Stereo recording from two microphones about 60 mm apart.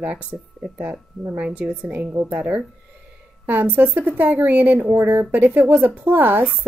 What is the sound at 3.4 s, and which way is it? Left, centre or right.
A woman's voice, right.